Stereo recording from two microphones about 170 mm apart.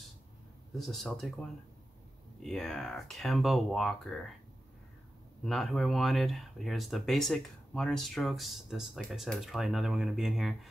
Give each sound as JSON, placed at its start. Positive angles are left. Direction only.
{"t": 0.7, "sound": "speech", "side_deg": 0}
{"t": 2.4, "sound": "speech", "side_deg": 0}
{"t": 5.4, "sound": "speech", "side_deg": 0}